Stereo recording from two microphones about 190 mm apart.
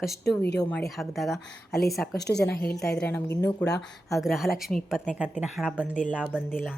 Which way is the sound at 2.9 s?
10° left (ahead or behind).